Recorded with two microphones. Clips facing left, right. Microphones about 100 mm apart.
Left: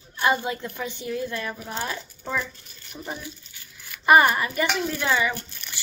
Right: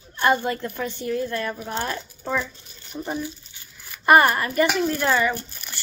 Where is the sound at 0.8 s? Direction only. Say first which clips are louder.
Right 4 dB; 50° right (ahead or behind).